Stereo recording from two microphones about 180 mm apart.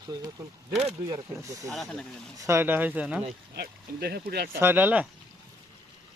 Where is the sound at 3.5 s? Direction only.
60° right (ahead or behind).